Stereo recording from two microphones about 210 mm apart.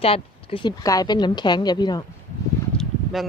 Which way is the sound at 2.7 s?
Centre (ahead or behind).